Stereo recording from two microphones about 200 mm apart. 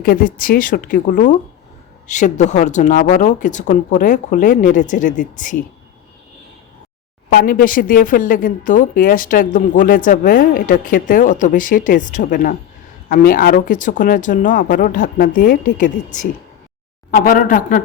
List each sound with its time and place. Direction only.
0.0 s a woman's voice: 45° left (ahead or behind)
7.3 s a woman's voice: 45° left (ahead or behind)
17.1 s a woman's voice: 45° left (ahead or behind)